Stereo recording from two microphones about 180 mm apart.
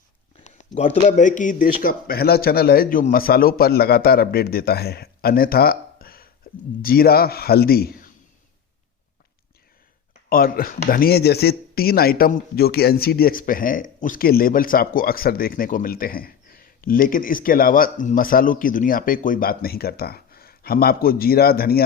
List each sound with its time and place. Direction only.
0.4 s a man's voice: 40° left (ahead or behind); by 6.2 s 55° left (ahead or behind)
6.5 s a sound: 50° left (ahead or behind)
6.8 s a man's voice: 55° left (ahead or behind)
10.2 s speech: 55° left (ahead or behind)